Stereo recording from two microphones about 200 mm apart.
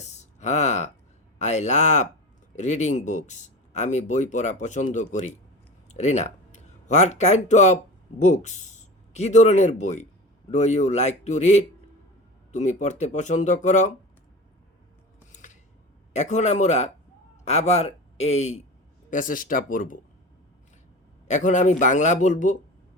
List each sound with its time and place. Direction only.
0.0 s a sound: 35° left (ahead or behind)
1.4 s speech: 35° left (ahead or behind)
15.3 s scissors: 40° left (ahead or behind)
16.1 s a man's voice: 35° left (ahead or behind)
21.2 s speech: 40° left (ahead or behind)